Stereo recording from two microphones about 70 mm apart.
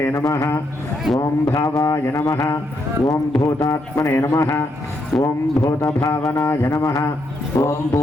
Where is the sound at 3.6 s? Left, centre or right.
Left.